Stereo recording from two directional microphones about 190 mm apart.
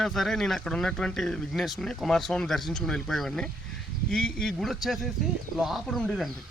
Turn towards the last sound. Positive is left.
turn(degrees=0)  # may be behind; listen again after turning